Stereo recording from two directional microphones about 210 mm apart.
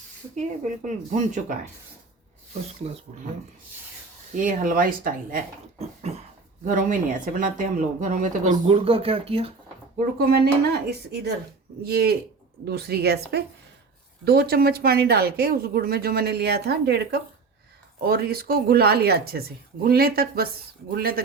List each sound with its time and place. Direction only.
0.9 s speech: 40° right (ahead or behind)
2.8 s cough: 25° right (ahead or behind)
4.3 s speech: 40° right (ahead or behind)
5.8 s cough: 30° right (ahead or behind)
6.7 s speech: 40° right (ahead or behind)
10.2 s speech: 50° right (ahead or behind)